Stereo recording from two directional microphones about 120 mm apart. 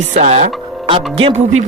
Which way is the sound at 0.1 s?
65° right (ahead or behind).